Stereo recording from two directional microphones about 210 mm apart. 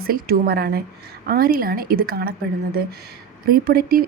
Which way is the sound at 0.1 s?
45° right (ahead or behind).